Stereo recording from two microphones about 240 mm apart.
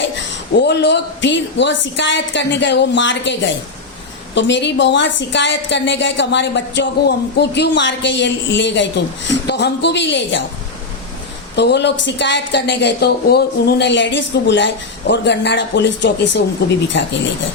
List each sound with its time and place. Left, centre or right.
0.3 s a woman's voice: left
11.5 s a woman's voice: left